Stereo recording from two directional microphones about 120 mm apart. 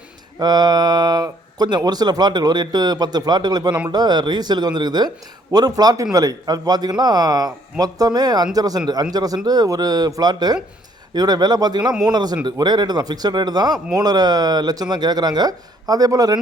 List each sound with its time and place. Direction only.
0.3 s speech: 35° right (ahead or behind)